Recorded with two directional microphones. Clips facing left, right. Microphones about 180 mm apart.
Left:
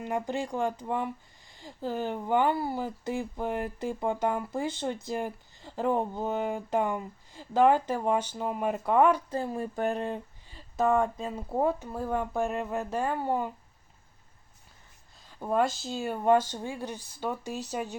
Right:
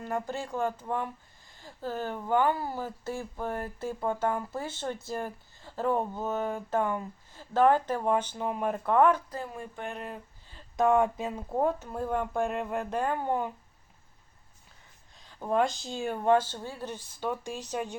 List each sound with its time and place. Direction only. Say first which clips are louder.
0.0 s speech: left 2 dB; 15° left (ahead or behind)
9.3 s speech: left 6 dB; 30° left (ahead or behind)
10.5 s speech: right 1 dB; centre (ahead or behind)
11.4 s speech: left 1 dB; 10° left (ahead or behind)
15.3 s speech: even; 5° left (ahead or behind)